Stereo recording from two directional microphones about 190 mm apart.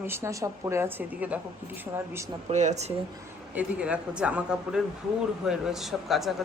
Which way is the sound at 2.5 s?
40° right (ahead or behind).